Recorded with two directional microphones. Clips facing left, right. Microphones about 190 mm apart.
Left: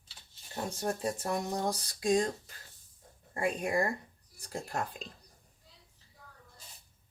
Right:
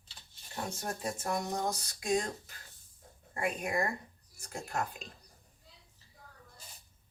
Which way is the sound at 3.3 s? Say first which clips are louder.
Left 3 dB; 30° left (ahead or behind).